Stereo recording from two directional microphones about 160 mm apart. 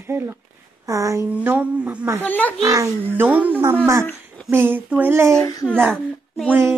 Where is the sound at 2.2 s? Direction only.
10° left (ahead or behind).